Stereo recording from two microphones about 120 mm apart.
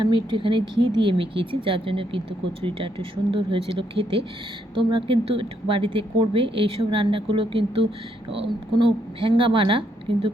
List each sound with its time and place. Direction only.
0.0 s speech: 40° right (ahead or behind)